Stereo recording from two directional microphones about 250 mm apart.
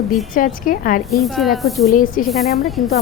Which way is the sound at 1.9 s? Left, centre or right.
Left.